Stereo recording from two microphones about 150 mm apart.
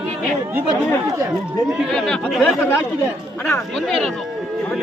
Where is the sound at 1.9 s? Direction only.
5° left (ahead or behind).